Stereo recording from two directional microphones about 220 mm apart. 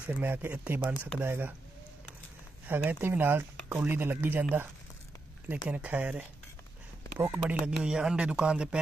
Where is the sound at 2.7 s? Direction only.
10° right (ahead or behind).